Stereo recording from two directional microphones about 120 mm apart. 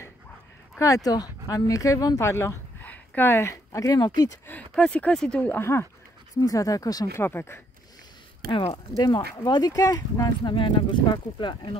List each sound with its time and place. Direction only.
0.7 s speech: 30° left (ahead or behind)
4.5 s speech: 10° left (ahead or behind)
5.6 s speech: 20° left (ahead or behind)
7.2 s speech: 20° left (ahead or behind)
8.5 s speech: 45° left (ahead or behind)